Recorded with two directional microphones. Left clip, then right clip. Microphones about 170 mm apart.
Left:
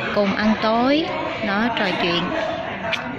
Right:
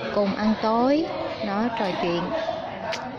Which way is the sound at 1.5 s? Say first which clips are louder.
Left 5 dB; 15° right (ahead or behind).